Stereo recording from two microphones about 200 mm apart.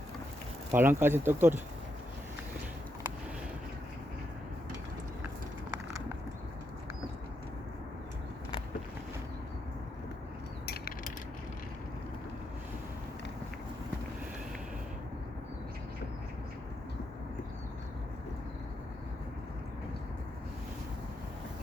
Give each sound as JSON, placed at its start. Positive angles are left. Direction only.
{"t": 0.7, "sound": "speech", "side_deg": -10}
{"t": 10.7, "sound": "mechanisms", "side_deg": 50}